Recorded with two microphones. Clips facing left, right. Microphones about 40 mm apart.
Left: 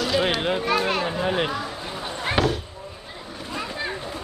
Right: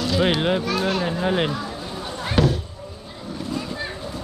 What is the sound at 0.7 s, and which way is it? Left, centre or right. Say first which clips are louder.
Speech: even; left.